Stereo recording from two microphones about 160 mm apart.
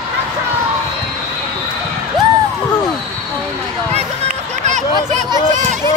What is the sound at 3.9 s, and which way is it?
Run, 50° right (ahead or behind).